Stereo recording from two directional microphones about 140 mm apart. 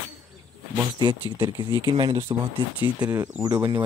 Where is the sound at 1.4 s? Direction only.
35° right (ahead or behind).